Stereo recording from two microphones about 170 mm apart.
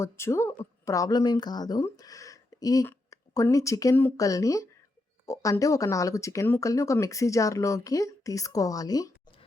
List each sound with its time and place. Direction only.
0.0 s speech: 15° left (ahead or behind)